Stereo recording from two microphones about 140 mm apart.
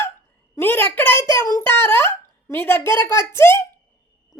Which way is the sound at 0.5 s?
15° left (ahead or behind).